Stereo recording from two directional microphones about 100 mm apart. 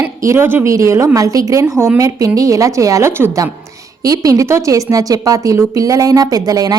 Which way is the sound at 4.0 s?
35° right (ahead or behind).